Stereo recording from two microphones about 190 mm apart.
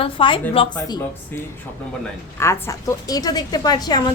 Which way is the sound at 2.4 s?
15° left (ahead or behind).